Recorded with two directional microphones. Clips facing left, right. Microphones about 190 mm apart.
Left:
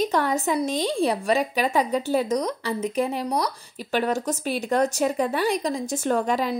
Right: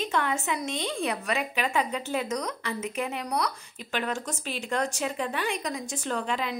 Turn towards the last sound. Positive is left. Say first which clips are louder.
# left 7 dB
turn(degrees=40)  # may be behind; listen again after turning